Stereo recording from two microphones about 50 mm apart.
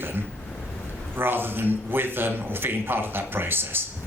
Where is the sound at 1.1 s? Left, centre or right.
Right.